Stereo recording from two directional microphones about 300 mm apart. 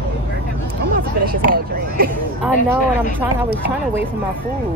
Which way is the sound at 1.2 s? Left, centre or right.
Right.